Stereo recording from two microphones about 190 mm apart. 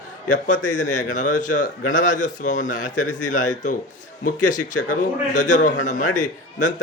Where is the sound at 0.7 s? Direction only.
40° left (ahead or behind).